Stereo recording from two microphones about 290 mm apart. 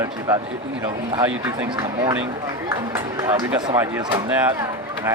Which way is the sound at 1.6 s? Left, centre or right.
Centre.